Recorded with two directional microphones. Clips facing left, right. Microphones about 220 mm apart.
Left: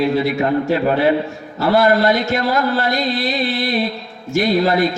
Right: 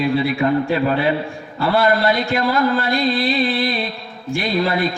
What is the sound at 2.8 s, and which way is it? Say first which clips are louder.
A man's voice: right 1 dB; 40° left (ahead or behind).